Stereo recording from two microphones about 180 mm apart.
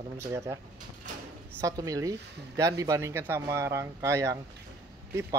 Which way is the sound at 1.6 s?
20° right (ahead or behind).